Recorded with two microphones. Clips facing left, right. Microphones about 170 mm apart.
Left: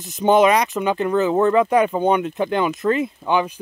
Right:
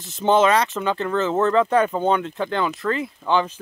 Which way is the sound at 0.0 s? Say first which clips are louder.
Left 3 dB; 15° left (ahead or behind).